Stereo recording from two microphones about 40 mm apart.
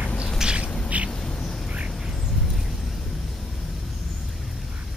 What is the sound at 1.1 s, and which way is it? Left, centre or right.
Duck, centre.